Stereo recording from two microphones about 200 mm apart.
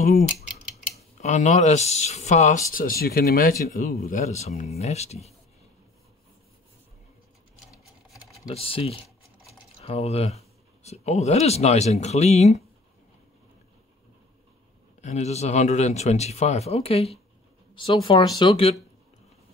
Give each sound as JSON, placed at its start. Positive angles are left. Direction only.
{"t": 0.7, "sound": "speech", "side_deg": 35}
{"t": 8.5, "sound": "speech", "side_deg": 30}
{"t": 15.0, "sound": "speech", "side_deg": 35}